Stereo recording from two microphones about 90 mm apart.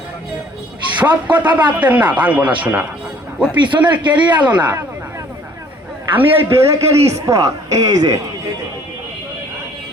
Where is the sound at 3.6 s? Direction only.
60° right (ahead or behind).